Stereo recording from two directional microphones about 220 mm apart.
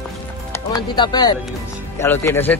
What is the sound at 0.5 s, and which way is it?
A man's voice, 20° left (ahead or behind).